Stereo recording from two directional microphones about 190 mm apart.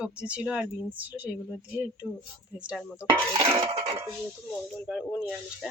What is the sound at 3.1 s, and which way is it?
Dishes, 20° right (ahead or behind).